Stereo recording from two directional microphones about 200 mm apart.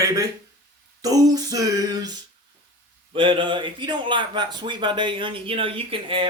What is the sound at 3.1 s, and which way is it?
Speech, 25° right (ahead or behind).